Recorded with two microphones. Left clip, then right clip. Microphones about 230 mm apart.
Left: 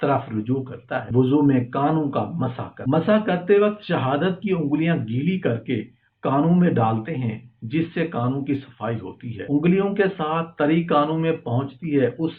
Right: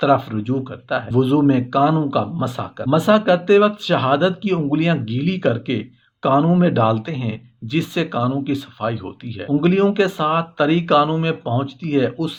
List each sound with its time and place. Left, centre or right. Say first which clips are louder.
0.0 s speech: right 5 dB; right